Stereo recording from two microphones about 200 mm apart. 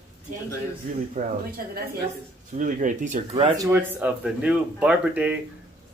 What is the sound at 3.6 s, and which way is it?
Speech, 10° right (ahead or behind).